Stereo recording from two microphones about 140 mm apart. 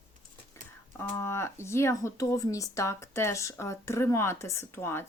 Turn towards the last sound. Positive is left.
turn(degrees=15)  # may be behind; listen again after turning